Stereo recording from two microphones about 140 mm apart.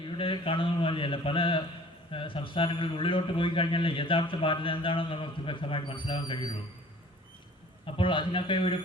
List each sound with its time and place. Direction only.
0.2 s a man's voice: 40° left (ahead or behind)
7.9 s a man's voice: 35° left (ahead or behind)